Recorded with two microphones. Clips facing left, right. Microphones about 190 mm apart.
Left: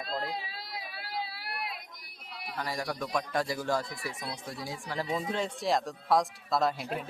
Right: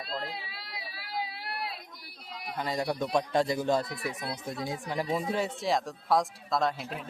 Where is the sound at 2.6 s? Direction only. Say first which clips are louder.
Right 4 dB; 20° right (ahead or behind).